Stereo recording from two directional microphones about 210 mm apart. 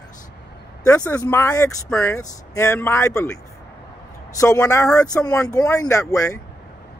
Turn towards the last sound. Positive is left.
turn(degrees=15)  # may be behind; listen again after turning